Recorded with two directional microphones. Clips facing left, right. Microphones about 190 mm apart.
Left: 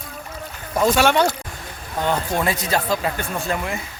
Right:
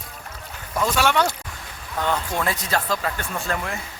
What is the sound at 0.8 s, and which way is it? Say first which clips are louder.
Speech: left 4 dB; 20° left (ahead or behind).